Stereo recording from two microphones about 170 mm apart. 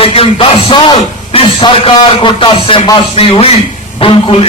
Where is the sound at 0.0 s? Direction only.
35° left (ahead or behind).